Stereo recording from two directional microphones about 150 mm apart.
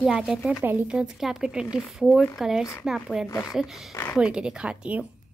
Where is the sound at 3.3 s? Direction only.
20° left (ahead or behind).